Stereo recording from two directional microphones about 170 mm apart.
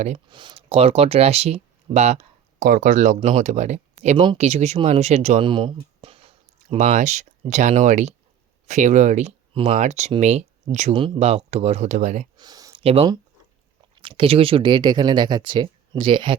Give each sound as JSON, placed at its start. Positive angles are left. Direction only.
{"t": 0.3, "sound": "speech", "side_deg": -30}
{"t": 6.7, "sound": "speech", "side_deg": -45}
{"t": 10.9, "sound": "speech", "side_deg": -30}
{"t": 11.2, "sound": "speech", "side_deg": -40}
{"t": 12.4, "sound": "a sound", "side_deg": -20}
{"t": 12.8, "sound": "speech", "side_deg": -35}